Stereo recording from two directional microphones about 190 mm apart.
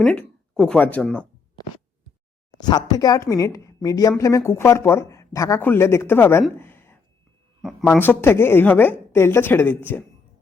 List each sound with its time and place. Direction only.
0.0 s speech: 5° left (ahead or behind)
2.6 s speech: 20° left (ahead or behind)
6.6 s a sound: 10° left (ahead or behind)
7.6 s speech: centre (ahead or behind)
8.0 s speech: 10° left (ahead or behind)